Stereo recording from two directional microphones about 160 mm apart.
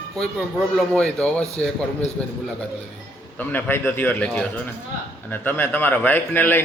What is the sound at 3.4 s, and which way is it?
A man's voice, 10° left (ahead or behind).